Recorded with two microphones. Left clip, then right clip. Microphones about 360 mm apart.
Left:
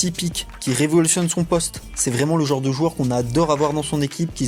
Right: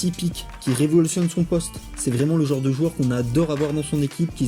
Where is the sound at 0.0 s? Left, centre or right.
Centre.